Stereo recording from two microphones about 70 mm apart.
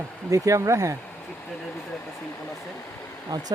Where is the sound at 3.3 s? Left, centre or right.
Right.